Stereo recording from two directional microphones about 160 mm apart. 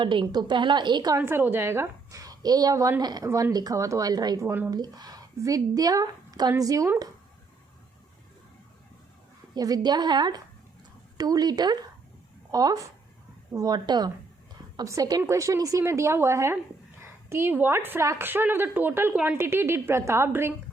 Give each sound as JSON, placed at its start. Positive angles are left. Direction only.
{"t": 0.0, "sound": "a woman's voice", "side_deg": -30}
{"t": 1.2, "sound": "a woman's voice", "side_deg": -15}
{"t": 9.6, "sound": "a woman's voice", "side_deg": -25}